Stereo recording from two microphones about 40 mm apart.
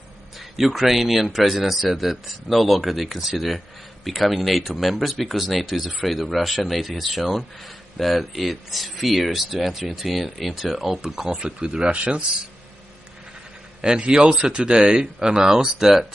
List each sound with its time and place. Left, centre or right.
0.6 s a man's voice: centre
11.0 s speech: centre
11.4 s speech: right
13.7 s speech: right